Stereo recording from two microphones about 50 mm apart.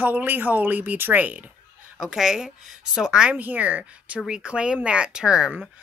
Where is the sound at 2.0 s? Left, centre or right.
Centre.